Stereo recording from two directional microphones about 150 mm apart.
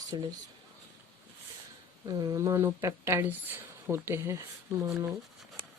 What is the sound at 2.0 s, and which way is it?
A woman's voice, 25° right (ahead or behind).